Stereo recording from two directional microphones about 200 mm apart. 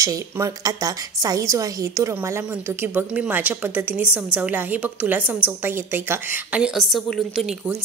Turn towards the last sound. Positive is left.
turn(degrees=0)  # may be behind; listen again after turning